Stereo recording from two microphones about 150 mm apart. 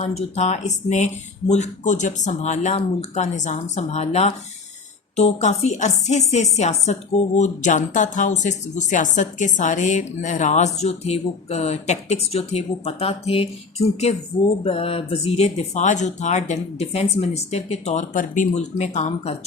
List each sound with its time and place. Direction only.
0.3 s speech: 50° left (ahead or behind)